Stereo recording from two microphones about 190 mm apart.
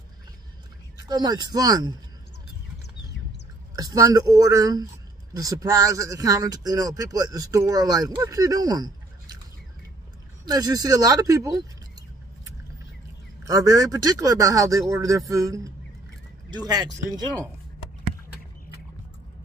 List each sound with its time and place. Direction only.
0.9 s speech: 20° right (ahead or behind)
3.7 s speech: 20° right (ahead or behind)
10.4 s speech: 20° right (ahead or behind)
13.5 s speech: 15° right (ahead or behind)